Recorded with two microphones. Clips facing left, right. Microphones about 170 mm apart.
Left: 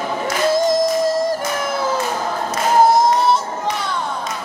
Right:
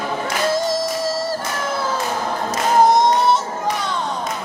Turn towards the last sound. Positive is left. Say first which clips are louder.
# even
turn(degrees=0)  # may be behind; listen again after turning